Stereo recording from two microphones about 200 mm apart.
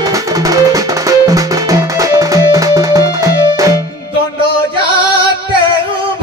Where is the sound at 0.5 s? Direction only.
15° right (ahead or behind).